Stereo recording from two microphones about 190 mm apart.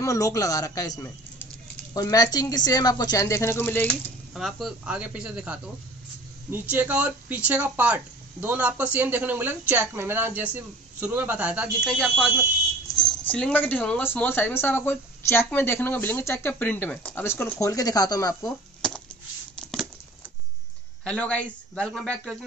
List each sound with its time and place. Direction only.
0.0 s a woman's voice: 15° left (ahead or behind); by 5.6 s 5° right (ahead or behind)
6.7 s speech: 10° right (ahead or behind); by 18.5 s 20° left (ahead or behind)
18.8 s a sound: 5° left (ahead or behind)
21.0 s a man's voice: 5° left (ahead or behind)